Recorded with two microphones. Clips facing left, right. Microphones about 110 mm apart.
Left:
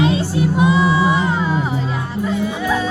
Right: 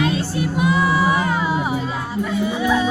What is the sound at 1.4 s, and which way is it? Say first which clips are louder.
Music: left 1 dB; 10° right (ahead or behind).